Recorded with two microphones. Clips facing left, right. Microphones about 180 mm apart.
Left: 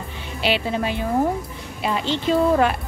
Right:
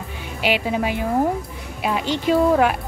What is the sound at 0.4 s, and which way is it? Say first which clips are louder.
Speech: right 1 dB; 10° right (ahead or behind).